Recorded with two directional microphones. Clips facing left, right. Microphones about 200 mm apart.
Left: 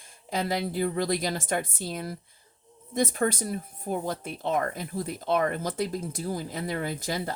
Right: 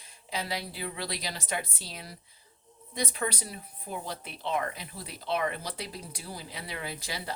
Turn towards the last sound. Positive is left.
turn(degrees=50)  # may be behind; listen again after turning